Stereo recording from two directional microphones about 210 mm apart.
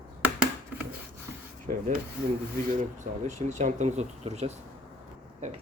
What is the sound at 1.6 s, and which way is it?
Rub, 40° right (ahead or behind).